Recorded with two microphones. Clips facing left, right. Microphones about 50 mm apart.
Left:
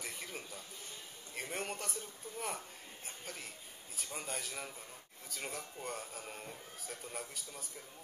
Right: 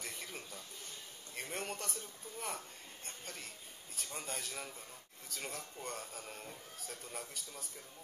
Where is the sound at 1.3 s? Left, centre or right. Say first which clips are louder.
Left 1 dB; centre.